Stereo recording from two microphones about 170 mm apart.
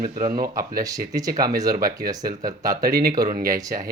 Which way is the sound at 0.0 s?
55° right (ahead or behind).